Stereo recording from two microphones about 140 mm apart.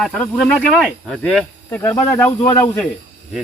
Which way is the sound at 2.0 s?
15° left (ahead or behind).